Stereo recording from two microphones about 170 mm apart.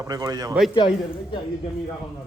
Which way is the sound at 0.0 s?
20° right (ahead or behind).